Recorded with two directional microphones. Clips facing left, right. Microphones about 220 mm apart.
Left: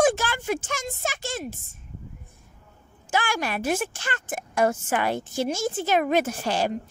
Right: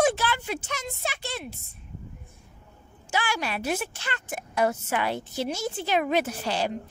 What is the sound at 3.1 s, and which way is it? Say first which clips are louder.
A woman's voice: left 3 dB; 50° left (ahead or behind).